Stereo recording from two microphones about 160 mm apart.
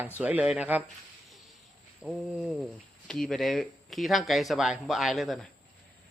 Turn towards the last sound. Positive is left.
turn(degrees=0)  # may be behind; listen again after turning